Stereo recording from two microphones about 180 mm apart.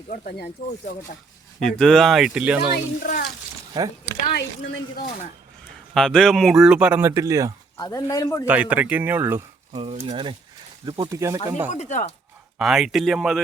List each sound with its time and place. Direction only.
0.1 s speech: 55° left (ahead or behind)
1.5 s speech: 5° left (ahead or behind)
3.0 s speech: 50° left (ahead or behind)
3.8 s speech: 20° right (ahead or behind)
4.3 s speech: 60° left (ahead or behind)
5.9 s speech: 5° left (ahead or behind); by 7.5 s 20° right (ahead or behind)
7.8 s speech: 20° left (ahead or behind)
8.4 s speech: 10° right (ahead or behind)
9.7 s speech: 35° right (ahead or behind)
11.1 s speech: 15° right (ahead or behind)
11.7 s speech: 40° left (ahead or behind)
12.5 s speech: centre (ahead or behind)